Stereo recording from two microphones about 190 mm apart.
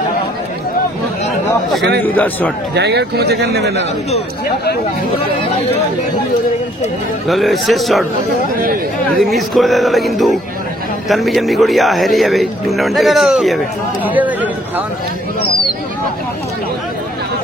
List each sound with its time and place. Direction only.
2.0 s a man's voice: 10° left (ahead or behind)
2.7 s speech: 60° right (ahead or behind)
5.4 s speech: 30° left (ahead or behind)
7.2 s a man's voice: centre (ahead or behind)
8.5 s speech: 50° right (ahead or behind)
9.2 s a man's voice: centre (ahead or behind)